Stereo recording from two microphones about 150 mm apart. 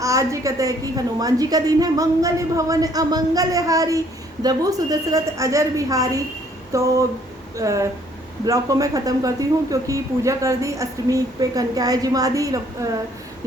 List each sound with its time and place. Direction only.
0.0 s speech: 20° right (ahead or behind)